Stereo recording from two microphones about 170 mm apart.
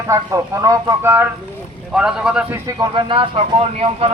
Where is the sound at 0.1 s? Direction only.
20° right (ahead or behind).